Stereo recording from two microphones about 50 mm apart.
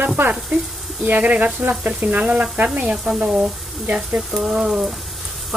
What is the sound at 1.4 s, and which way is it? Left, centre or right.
Speech, right.